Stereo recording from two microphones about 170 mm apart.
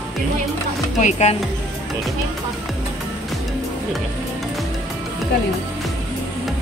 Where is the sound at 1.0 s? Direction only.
45° left (ahead or behind).